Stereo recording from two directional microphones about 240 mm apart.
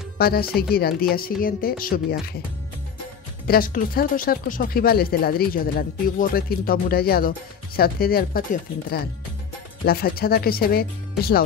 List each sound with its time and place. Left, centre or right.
0.2 s speech: left
3.4 s speech: left
9.8 s speech: left